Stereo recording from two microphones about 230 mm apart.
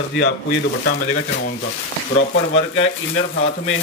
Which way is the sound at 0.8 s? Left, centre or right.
Left.